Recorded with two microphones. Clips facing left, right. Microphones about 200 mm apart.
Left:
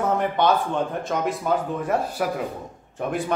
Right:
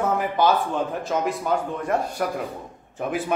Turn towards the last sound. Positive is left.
turn(degrees=0)  # may be behind; listen again after turning